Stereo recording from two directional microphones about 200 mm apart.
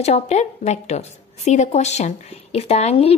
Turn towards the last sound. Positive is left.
turn(degrees=30)  # may be behind; listen again after turning